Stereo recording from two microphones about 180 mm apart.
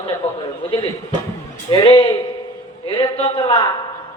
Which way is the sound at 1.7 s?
25° left (ahead or behind).